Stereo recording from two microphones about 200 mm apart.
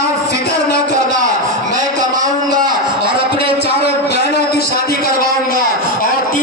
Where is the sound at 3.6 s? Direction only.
55° left (ahead or behind).